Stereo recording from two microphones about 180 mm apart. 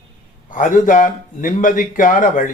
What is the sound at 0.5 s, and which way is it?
Speech, 45° left (ahead or behind).